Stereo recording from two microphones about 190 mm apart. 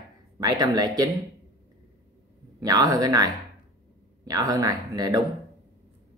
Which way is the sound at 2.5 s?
20° right (ahead or behind).